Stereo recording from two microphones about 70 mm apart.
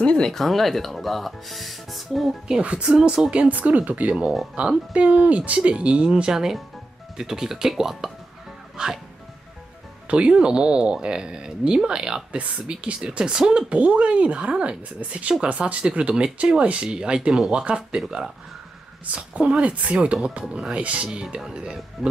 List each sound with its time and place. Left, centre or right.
0.0 s speech: centre
2.4 s speech: centre
8.7 s music: centre
10.0 s speech: centre